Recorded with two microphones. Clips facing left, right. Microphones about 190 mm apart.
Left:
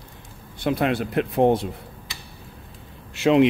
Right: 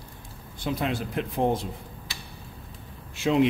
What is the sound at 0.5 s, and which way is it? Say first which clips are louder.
Speech: left 6 dB; 65° left (ahead or behind).